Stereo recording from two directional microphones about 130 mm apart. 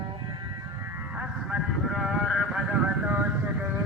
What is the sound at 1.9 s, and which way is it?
Sheep, centre (ahead or behind).